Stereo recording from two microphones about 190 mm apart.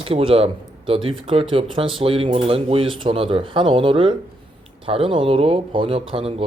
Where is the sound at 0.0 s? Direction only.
30° right (ahead or behind).